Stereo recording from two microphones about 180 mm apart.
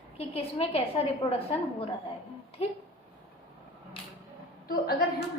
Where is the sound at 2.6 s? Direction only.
35° left (ahead or behind).